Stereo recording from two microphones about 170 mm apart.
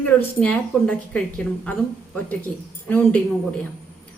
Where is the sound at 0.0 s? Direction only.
10° left (ahead or behind).